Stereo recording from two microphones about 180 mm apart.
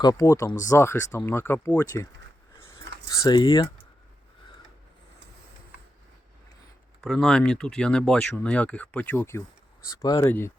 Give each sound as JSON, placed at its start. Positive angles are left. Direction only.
{"t": 0.0, "sound": "speech", "side_deg": 20}
{"t": 2.6, "sound": "a sound", "side_deg": 15}
{"t": 7.0, "sound": "speech", "side_deg": 0}